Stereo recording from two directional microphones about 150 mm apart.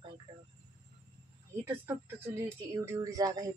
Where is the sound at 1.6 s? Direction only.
15° right (ahead or behind).